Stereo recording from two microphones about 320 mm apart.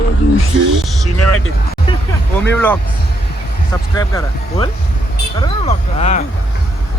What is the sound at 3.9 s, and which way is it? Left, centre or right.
Speech, centre.